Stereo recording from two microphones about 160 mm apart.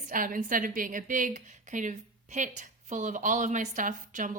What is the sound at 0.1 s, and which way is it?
A woman's voice, 60° right (ahead or behind).